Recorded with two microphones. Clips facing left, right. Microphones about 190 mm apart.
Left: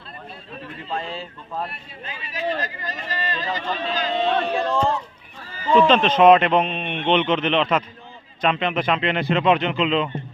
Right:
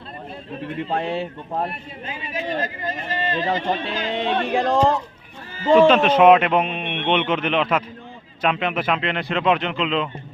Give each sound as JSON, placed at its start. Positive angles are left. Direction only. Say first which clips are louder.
{"t": 0.9, "sound": "speech", "louder": "right 5 dB", "side_deg": -65}
{"t": 2.0, "sound": "speech", "louder": "left 1 dB", "side_deg": -25}
{"t": 4.1, "sound": "music", "louder": "right 1 dB", "side_deg": -85}
{"t": 5.9, "sound": "a man's voice", "louder": "right 1 dB", "side_deg": -10}